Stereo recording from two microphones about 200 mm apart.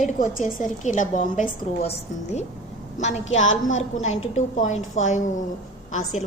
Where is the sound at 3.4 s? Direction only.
75° left (ahead or behind).